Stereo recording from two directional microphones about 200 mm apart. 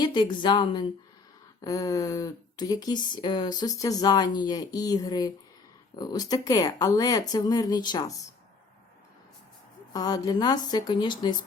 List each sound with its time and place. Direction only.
0.0 s speech: 20° left (ahead or behind)
9.9 s speech: 20° left (ahead or behind)